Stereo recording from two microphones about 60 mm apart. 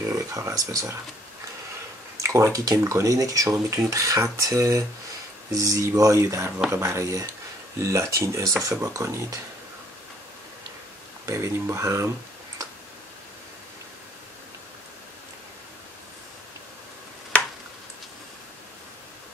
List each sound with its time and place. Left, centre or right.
0.1 s speech: right
2.2 s speech: right
2.6 s speech: right
11.2 s speech: right